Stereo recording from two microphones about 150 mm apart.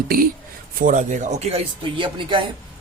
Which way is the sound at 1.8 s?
35° right (ahead or behind).